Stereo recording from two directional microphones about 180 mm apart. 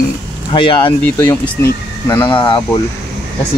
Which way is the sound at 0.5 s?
25° left (ahead or behind).